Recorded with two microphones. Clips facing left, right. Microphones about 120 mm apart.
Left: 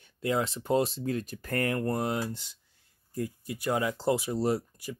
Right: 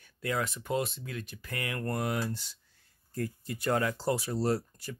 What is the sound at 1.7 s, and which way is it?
Speech, 25° left (ahead or behind).